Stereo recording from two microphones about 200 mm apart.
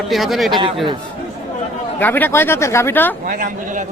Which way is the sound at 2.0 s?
10° left (ahead or behind).